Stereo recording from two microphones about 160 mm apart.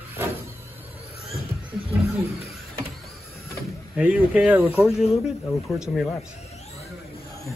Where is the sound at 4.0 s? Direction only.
10° right (ahead or behind).